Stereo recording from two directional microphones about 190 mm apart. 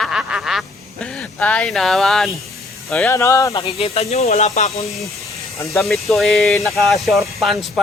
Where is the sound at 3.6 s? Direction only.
30° left (ahead or behind).